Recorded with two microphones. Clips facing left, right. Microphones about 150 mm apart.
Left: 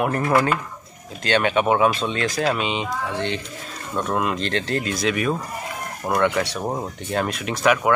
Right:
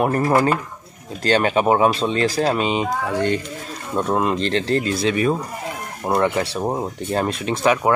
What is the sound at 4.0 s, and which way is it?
Speech, 30° right (ahead or behind).